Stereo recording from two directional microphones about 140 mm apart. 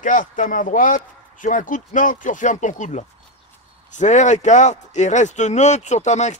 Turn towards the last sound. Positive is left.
turn(degrees=55)  # may be behind; listen again after turning